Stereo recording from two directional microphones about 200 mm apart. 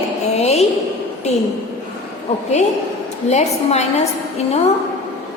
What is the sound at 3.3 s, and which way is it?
Speech, 35° left (ahead or behind).